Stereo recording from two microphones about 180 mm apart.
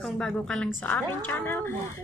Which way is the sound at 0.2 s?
5° left (ahead or behind).